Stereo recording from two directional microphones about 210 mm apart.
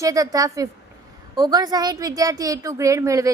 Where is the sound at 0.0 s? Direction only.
15° right (ahead or behind).